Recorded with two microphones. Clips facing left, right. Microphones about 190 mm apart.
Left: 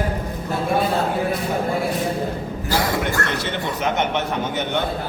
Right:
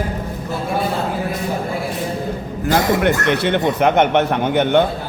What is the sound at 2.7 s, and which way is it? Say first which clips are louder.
A man's voice: right 7 dB; 60° right (ahead or behind).